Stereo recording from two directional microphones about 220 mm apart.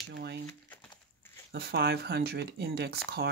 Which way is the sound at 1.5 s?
50° right (ahead or behind).